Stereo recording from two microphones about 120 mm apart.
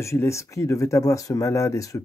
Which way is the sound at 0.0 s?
25° left (ahead or behind).